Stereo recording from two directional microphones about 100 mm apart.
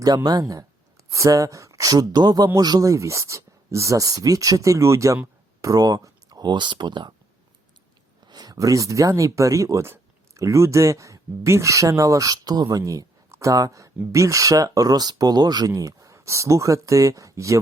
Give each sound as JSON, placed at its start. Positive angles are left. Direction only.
{"t": 0.0, "sound": "speech", "side_deg": -45}
{"t": 8.3, "sound": "speech", "side_deg": -40}